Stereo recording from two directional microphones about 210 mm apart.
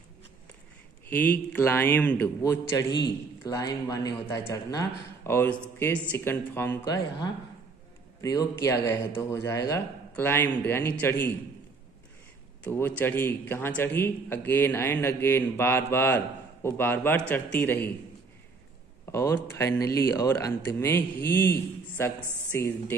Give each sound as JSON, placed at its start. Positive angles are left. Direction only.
{"t": 1.0, "sound": "speech", "side_deg": 10}
{"t": 12.6, "sound": "speech", "side_deg": 10}
{"t": 19.0, "sound": "speech", "side_deg": 15}